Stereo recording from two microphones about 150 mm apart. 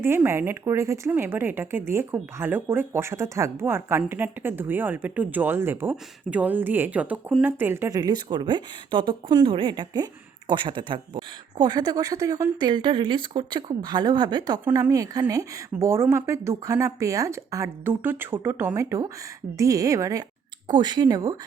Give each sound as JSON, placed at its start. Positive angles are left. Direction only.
{"t": 0.0, "sound": "speech", "side_deg": -15}